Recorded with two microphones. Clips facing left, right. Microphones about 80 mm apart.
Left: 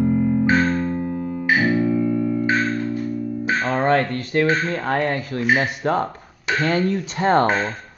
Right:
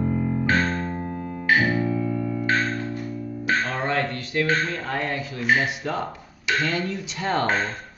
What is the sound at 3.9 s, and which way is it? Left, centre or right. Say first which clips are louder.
Speech: left 6 dB; left.